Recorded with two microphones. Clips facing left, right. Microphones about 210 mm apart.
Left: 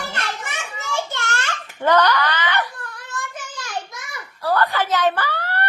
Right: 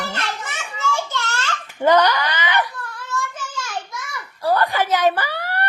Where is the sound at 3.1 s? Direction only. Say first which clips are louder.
Right 5 dB; 15° left (ahead or behind).